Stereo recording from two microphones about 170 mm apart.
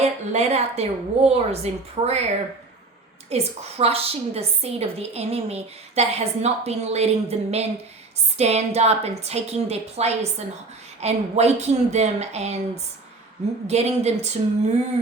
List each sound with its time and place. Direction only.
0.0 s a woman's voice: 40° right (ahead or behind)
3.2 s a woman's voice: 35° right (ahead or behind)